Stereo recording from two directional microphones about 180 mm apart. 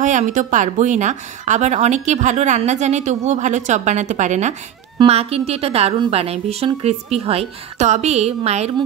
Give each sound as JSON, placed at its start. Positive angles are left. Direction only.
{"t": 0.0, "sound": "a woman's voice", "side_deg": -45}